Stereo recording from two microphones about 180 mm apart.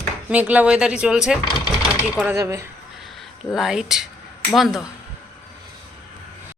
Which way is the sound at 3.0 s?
Centre (ahead or behind).